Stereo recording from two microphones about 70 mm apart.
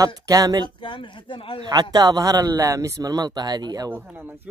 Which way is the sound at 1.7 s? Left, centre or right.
Right.